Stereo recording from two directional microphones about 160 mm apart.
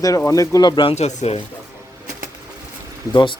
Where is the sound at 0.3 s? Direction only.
20° left (ahead or behind); by 1.4 s 45° left (ahead or behind).